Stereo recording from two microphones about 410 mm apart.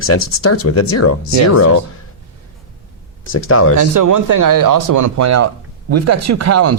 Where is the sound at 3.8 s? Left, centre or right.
Right.